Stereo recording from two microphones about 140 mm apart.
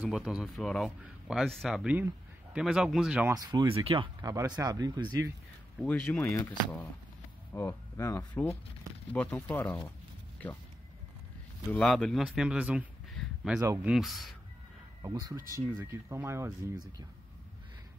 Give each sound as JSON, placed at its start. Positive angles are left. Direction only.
{"t": 0.0, "sound": "speech", "side_deg": -5}
{"t": 3.3, "sound": "speech", "side_deg": -30}
{"t": 5.9, "sound": "speech", "side_deg": 10}
{"t": 11.7, "sound": "speech", "side_deg": 5}
{"t": 13.1, "sound": "a sound", "side_deg": 0}
{"t": 13.8, "sound": "speech", "side_deg": 0}
{"t": 15.0, "sound": "speech", "side_deg": -25}
{"t": 15.5, "sound": "speech", "side_deg": -15}